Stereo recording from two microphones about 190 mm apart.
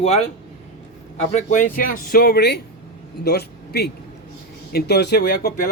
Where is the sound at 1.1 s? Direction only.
35° left (ahead or behind).